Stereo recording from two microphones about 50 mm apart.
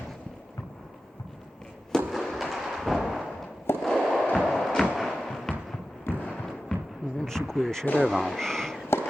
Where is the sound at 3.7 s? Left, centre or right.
Left.